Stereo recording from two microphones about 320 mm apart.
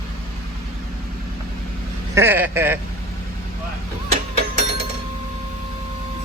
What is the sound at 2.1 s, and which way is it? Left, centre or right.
Speech, centre.